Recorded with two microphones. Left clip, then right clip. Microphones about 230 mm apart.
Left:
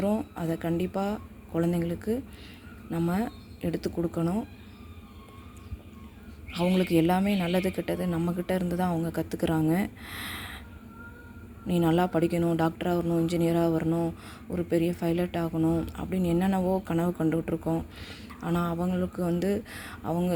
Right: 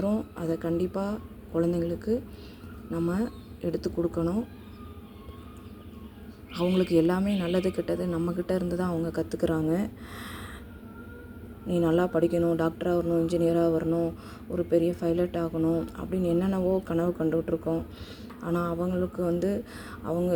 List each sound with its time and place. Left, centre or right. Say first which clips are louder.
0.0 s a woman's voice: left 1 dB; left
6.5 s a woman's voice: right 1 dB; left
11.7 s a woman's voice: right 1 dB; left
18.4 s a woman's voice: right 1 dB; left